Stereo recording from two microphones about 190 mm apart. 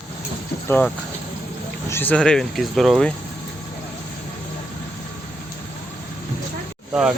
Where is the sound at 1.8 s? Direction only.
10° left (ahead or behind).